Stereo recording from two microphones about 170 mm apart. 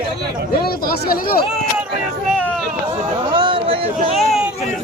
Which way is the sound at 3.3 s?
30° right (ahead or behind).